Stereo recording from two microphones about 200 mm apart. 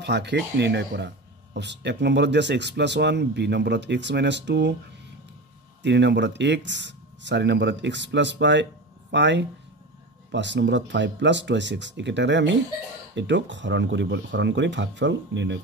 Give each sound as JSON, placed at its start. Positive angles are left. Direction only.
{"t": 0.0, "sound": "speech", "side_deg": -55}
{"t": 5.8, "sound": "speech", "side_deg": -60}